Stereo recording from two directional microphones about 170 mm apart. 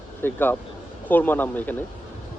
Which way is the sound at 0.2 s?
10° left (ahead or behind).